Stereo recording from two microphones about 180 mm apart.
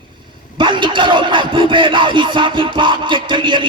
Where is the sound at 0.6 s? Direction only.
25° right (ahead or behind).